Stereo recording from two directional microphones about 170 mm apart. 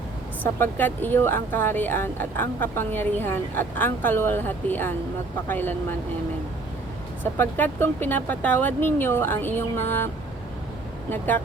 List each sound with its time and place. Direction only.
0.6 s speech: 10° left (ahead or behind)
7.3 s speech: 10° left (ahead or behind)